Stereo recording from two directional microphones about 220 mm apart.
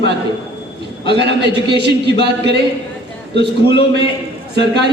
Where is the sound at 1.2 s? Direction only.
50° right (ahead or behind).